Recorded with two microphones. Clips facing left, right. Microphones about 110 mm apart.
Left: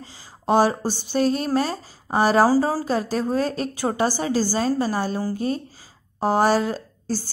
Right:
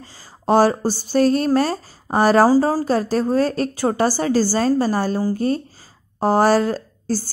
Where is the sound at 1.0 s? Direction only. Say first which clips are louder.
Right 5 dB; 45° right (ahead or behind).